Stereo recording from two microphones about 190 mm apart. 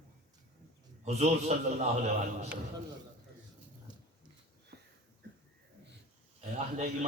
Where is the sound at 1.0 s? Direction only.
35° right (ahead or behind).